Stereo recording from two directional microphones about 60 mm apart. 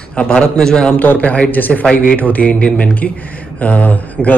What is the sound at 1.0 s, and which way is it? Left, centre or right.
A man's voice, left.